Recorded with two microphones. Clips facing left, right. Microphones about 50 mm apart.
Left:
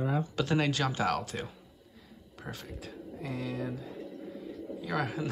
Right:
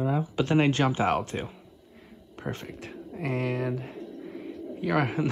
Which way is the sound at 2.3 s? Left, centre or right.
Right.